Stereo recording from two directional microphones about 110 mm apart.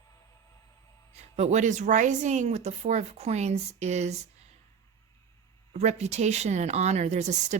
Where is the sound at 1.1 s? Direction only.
90° right.